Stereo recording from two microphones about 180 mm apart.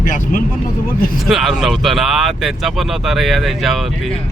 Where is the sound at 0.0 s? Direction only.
45° left (ahead or behind).